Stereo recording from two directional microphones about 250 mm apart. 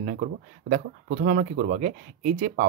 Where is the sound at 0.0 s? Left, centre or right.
Right.